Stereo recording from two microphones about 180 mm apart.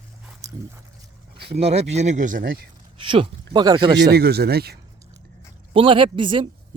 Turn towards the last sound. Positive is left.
turn(degrees=-30)  # may be behind; listen again after turning